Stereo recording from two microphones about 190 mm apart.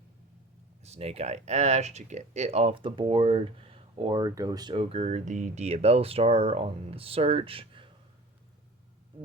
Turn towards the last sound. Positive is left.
turn(degrees=-30)  # may be behind; listen again after turning